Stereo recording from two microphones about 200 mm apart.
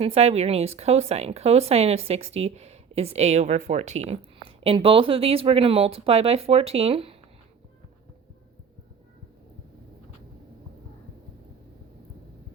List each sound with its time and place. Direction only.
0.0 s speech: 30° right (ahead or behind)